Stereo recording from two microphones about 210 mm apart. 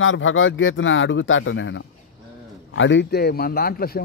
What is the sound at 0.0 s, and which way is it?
A man's voice, 70° left (ahead or behind).